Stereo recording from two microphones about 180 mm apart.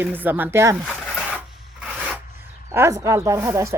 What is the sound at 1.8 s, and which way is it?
Rub, centre (ahead or behind).